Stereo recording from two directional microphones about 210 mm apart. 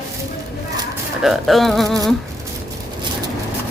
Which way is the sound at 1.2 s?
Centre (ahead or behind).